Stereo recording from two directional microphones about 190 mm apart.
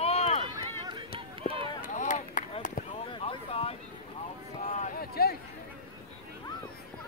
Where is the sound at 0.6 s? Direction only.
25° right (ahead or behind).